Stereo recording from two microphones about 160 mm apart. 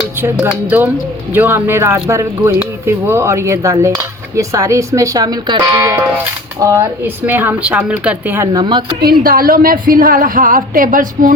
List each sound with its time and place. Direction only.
0.2 s a woman's voice: 15° right (ahead or behind)
8.5 s speech: 30° right (ahead or behind)
9.0 s a woman's voice: 70° right (ahead or behind)